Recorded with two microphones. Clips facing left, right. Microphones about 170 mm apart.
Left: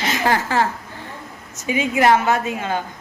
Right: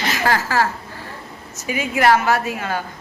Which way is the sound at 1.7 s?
20° left (ahead or behind).